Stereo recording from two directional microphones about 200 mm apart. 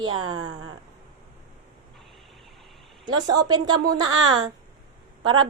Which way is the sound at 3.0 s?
20° right (ahead or behind).